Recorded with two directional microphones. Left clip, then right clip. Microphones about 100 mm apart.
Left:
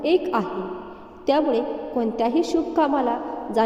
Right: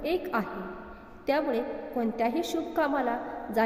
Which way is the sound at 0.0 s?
35° left (ahead or behind).